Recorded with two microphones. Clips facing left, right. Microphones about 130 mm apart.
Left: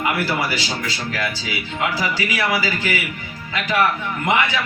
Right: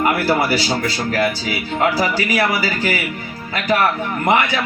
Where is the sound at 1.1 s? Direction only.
40° right (ahead or behind).